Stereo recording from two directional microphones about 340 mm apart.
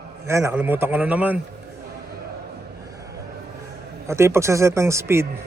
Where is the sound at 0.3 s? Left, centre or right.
Centre.